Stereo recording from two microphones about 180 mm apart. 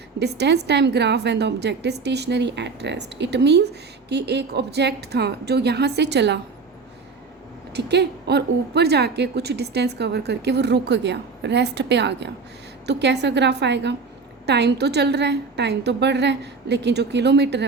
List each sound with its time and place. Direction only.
0.2 s a woman's voice: 70° right (ahead or behind)
7.7 s a woman's voice: 70° right (ahead or behind)